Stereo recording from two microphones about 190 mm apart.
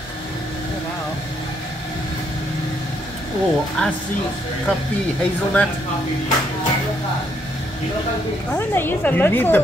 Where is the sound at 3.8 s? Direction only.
5° left (ahead or behind).